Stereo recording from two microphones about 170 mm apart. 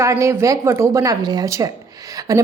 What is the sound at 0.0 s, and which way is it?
A woman's voice, 20° right (ahead or behind).